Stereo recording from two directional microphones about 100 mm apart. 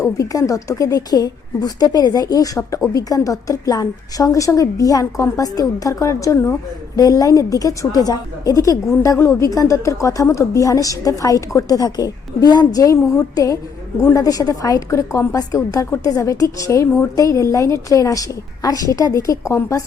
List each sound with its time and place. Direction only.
0.0 s a woman's voice: 35° left (ahead or behind)